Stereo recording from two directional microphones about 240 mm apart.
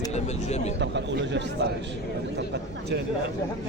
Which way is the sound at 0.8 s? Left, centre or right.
Right.